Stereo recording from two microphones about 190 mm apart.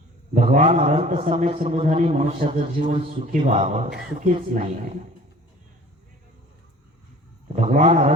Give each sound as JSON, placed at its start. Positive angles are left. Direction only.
{"t": 0.4, "sound": "a man's voice", "side_deg": -30}
{"t": 7.5, "sound": "a man's voice", "side_deg": -40}